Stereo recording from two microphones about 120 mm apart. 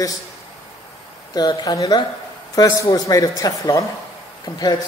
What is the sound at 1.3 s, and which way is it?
Speech, 30° left (ahead or behind).